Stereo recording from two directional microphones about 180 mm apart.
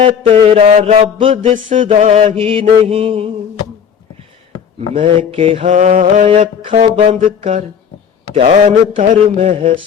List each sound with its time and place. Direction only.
0.0 s mantra: 35° right (ahead or behind)
4.9 s mantra: 30° right (ahead or behind)